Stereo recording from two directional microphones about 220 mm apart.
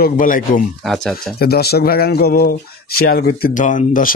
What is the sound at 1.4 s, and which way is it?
Speech, 45° left (ahead or behind).